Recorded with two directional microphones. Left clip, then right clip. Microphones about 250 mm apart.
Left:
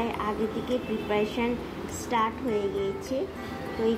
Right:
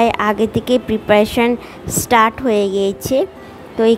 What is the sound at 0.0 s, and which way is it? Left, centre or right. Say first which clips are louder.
A woman's voice: right 15 dB; right.